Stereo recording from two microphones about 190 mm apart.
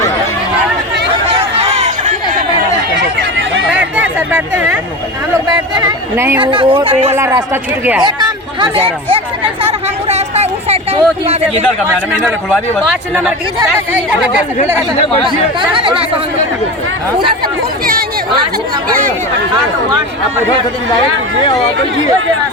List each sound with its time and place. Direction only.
1.3 s chatter: 30° right (ahead or behind)
3.7 s a sound: 5° right (ahead or behind)
6.4 s speech: 25° right (ahead or behind)
7.1 s speech: 15° right (ahead or behind)
8.0 s chatter: 25° right (ahead or behind)
13.6 s speech: 10° right (ahead or behind)
15.7 s speech: 30° right (ahead or behind)
17.4 s chatter: 50° right (ahead or behind)